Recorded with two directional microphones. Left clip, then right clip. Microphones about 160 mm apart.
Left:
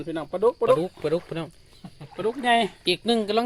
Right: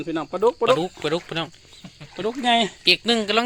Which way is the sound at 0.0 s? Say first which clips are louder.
Right 2 dB; 40° right (ahead or behind).